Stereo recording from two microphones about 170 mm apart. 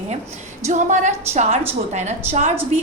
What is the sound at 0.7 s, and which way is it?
A woman's voice, 45° right (ahead or behind).